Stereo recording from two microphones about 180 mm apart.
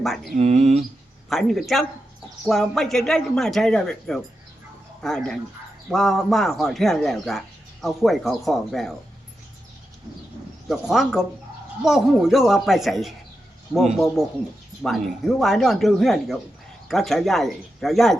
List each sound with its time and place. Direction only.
0.0 s speech: centre (ahead or behind)
0.3 s a sound: 40° right (ahead or behind)
1.3 s speech: centre (ahead or behind)
10.7 s speech: centre (ahead or behind)